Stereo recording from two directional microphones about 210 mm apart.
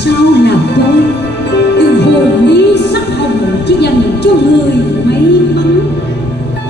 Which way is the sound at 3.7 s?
55° left (ahead or behind).